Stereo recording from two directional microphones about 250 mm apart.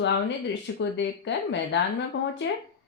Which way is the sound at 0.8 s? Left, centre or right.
Left.